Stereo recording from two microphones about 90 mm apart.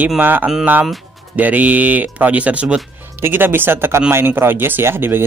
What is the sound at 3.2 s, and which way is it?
Speech, 25° right (ahead or behind).